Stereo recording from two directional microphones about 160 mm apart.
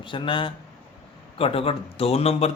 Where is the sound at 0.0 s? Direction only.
30° left (ahead or behind).